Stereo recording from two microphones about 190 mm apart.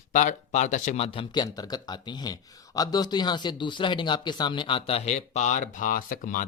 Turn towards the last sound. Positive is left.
turn(degrees=45)  # may be behind; listen again after turning